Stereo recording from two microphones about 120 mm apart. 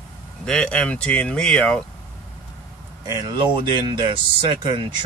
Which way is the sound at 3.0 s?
35° right (ahead or behind).